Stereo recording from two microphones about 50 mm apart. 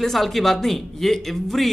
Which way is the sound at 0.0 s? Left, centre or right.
Centre.